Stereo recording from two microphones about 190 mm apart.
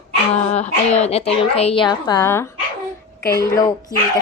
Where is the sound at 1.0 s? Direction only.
30° left (ahead or behind); by 2.5 s 15° left (ahead or behind).